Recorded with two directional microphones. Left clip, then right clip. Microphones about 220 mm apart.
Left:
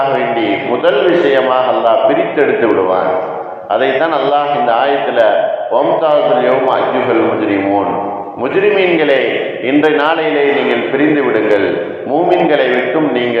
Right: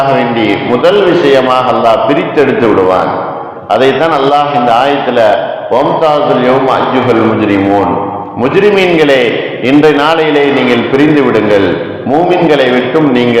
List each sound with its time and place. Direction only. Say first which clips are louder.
1.3 s a man's voice: right 4 dB; 50° right (ahead or behind)
3.7 s a man's voice: right 5 dB; 50° right (ahead or behind)
9.6 s a man's voice: right 5 dB; 50° right (ahead or behind)